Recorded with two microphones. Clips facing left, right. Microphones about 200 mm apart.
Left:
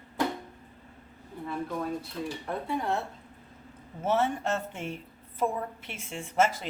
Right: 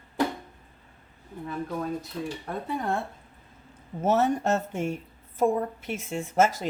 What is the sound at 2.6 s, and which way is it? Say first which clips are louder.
Speech: right 1 dB; 50° right (ahead or behind).